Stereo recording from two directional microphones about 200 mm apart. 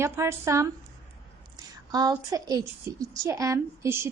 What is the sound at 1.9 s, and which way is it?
A woman's voice, 20° right (ahead or behind).